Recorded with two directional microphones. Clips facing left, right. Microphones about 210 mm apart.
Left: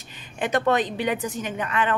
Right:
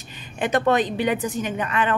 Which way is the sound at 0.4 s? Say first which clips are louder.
Right 2 dB; 15° right (ahead or behind).